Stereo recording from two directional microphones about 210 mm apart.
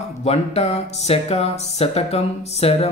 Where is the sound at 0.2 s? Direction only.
30° left (ahead or behind).